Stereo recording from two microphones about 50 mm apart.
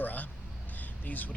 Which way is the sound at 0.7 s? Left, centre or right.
Left.